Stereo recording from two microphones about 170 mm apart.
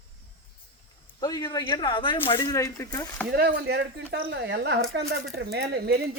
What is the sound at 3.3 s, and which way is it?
Speech, 80° right.